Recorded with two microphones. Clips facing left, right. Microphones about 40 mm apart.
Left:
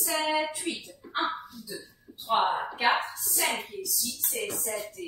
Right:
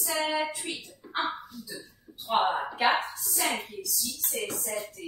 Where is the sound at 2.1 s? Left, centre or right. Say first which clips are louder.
Left 1 dB; right.